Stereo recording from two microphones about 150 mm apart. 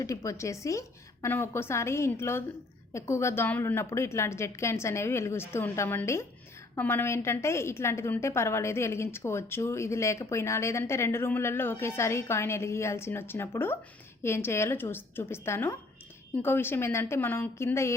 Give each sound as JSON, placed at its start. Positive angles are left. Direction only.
{"t": 0.0, "sound": "a woman's voice", "side_deg": 20}